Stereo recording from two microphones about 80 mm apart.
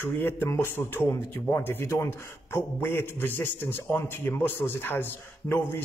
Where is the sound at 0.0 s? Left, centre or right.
Left.